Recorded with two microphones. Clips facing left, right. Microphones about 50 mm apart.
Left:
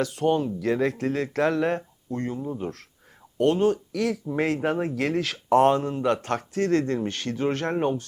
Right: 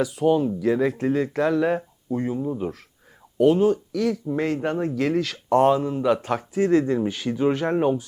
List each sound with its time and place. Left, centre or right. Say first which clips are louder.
0.0 s speech: right 3 dB; centre